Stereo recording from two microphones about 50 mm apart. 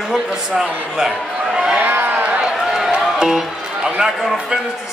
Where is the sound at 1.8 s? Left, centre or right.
Right.